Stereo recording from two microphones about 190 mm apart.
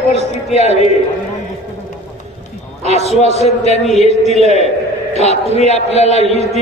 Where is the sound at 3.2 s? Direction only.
35° left (ahead or behind).